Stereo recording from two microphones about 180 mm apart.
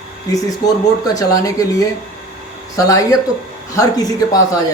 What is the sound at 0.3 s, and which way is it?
Speech, 20° left (ahead or behind).